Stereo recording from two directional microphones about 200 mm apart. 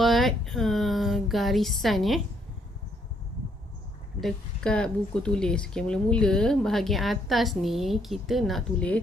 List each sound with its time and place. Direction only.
0.0 s speech: centre (ahead or behind)
4.2 s speech: centre (ahead or behind)